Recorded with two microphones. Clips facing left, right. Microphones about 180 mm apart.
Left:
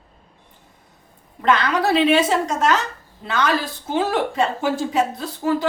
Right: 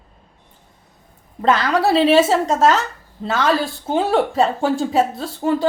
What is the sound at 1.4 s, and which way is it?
A woman's voice, 30° right (ahead or behind).